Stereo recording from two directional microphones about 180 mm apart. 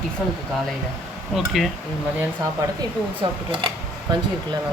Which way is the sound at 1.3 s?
Centre (ahead or behind).